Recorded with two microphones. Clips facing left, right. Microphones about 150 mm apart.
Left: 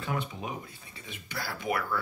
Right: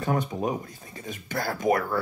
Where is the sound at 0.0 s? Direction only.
45° right (ahead or behind).